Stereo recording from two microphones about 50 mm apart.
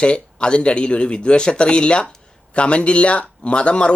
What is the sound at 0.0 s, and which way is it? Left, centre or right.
Speech, centre.